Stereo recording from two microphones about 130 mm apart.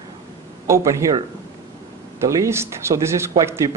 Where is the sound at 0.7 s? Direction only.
25° right (ahead or behind).